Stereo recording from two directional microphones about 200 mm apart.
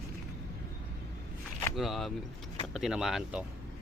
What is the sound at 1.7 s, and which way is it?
Speech, centre (ahead or behind).